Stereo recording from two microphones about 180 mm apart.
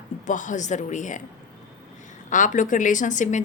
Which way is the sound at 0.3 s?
45° left (ahead or behind).